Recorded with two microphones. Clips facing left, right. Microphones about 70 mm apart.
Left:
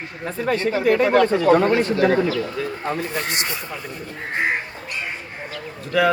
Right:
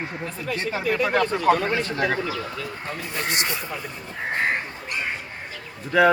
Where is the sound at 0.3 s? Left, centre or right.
Left.